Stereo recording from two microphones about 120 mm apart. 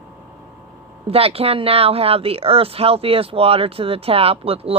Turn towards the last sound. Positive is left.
turn(degrees=-55)  # may be behind; listen again after turning